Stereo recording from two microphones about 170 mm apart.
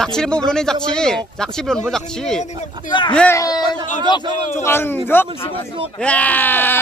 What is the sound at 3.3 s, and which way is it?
Speech, 20° left (ahead or behind).